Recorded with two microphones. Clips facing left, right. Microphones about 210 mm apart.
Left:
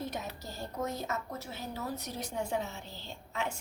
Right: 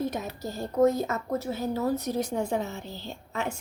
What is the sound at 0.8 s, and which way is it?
A woman's voice, 55° right (ahead or behind).